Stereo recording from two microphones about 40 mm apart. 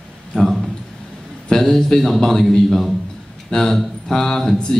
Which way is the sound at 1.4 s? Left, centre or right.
Centre.